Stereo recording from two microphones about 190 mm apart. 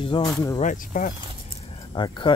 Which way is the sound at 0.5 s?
40° left (ahead or behind).